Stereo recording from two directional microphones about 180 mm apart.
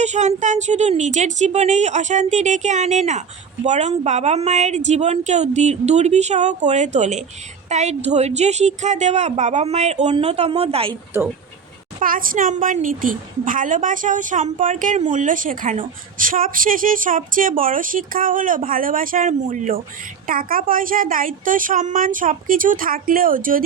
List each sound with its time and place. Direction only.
0.0 s a woman's voice: 40° right (ahead or behind)
11.9 s a woman's voice: 50° right (ahead or behind)